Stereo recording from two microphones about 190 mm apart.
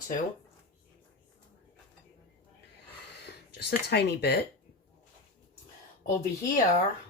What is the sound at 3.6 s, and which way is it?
Speech, 60° left (ahead or behind).